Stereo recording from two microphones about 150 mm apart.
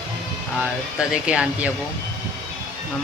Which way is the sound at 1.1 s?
5° right (ahead or behind).